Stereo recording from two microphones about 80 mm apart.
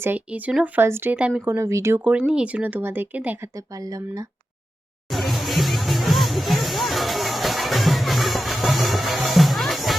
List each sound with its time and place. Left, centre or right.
0.3 s speech: centre; by 2.0 s right
2.0 s speech: centre
3.8 s speech: right
5.1 s music: centre